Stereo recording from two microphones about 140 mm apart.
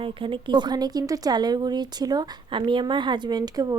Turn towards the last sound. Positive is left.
turn(degrees=-30)  # may be behind; listen again after turning